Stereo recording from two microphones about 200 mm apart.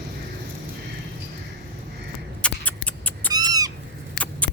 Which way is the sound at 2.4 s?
5° left (ahead or behind).